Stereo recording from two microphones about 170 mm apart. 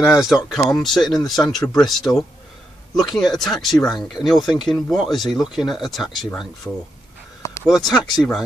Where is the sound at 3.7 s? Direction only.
25° left (ahead or behind).